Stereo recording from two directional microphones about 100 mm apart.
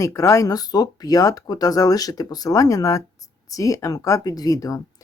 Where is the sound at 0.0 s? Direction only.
30° left (ahead or behind).